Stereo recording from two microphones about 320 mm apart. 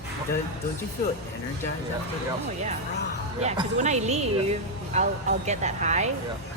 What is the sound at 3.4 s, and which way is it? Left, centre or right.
Speech, right.